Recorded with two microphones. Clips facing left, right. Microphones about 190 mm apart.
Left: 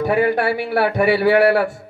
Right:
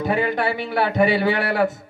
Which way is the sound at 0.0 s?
20° right (ahead or behind).